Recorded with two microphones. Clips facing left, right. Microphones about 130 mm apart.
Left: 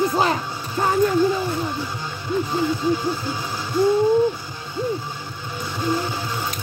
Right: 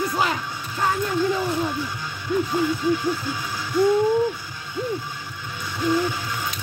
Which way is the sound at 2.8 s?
30° left (ahead or behind).